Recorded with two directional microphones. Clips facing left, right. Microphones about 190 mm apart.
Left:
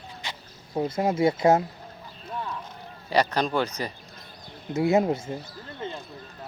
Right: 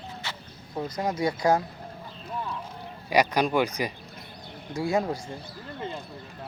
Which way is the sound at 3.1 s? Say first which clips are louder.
Right 1 dB; 10° right (ahead or behind).